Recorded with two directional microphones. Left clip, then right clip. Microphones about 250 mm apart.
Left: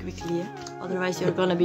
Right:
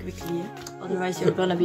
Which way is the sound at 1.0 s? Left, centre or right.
Left.